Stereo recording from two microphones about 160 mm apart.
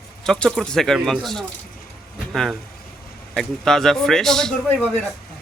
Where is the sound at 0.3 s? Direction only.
5° left (ahead or behind).